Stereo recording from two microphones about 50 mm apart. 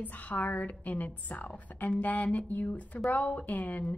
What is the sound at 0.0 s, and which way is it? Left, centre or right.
A woman's voice, left.